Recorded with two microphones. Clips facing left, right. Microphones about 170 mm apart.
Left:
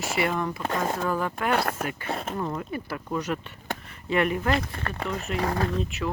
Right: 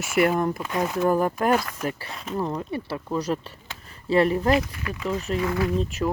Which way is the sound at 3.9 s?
35° right (ahead or behind).